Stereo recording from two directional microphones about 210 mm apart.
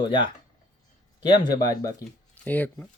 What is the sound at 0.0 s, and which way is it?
Speech, 25° left (ahead or behind).